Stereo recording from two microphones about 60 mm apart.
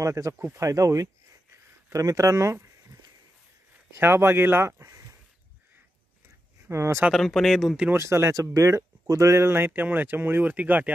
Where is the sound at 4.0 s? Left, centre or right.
Right.